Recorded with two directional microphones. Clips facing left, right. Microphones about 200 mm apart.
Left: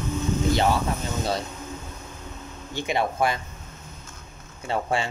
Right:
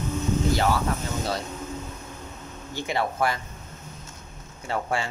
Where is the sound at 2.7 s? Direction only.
20° left (ahead or behind).